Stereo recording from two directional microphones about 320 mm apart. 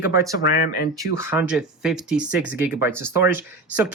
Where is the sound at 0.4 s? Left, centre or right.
Left.